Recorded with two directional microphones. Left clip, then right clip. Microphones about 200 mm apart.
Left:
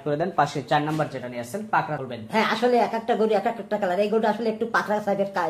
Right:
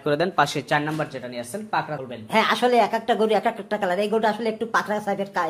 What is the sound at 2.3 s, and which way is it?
Speech, 25° right (ahead or behind).